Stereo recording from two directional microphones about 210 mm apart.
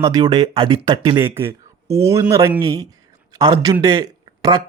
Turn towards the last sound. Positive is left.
turn(degrees=-20)  # may be behind; listen again after turning